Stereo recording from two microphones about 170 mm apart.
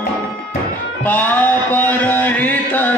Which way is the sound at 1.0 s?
10° left (ahead or behind).